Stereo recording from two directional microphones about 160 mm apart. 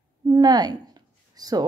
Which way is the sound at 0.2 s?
25° right (ahead or behind).